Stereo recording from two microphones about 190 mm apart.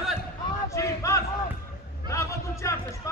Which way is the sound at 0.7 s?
15° left (ahead or behind).